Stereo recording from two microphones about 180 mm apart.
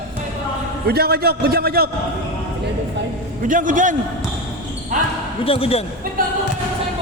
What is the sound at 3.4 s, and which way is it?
Speech, 45° right (ahead or behind).